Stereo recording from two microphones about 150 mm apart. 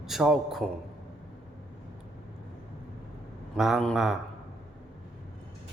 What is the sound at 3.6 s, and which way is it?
Speech, centre (ahead or behind).